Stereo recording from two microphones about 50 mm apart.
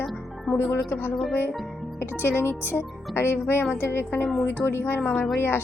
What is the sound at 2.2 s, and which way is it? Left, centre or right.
Speech, left.